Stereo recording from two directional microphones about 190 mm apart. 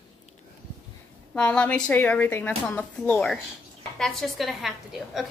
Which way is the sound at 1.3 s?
5° left (ahead or behind).